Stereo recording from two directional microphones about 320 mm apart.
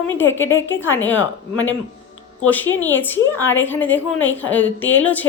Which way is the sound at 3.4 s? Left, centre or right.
Left.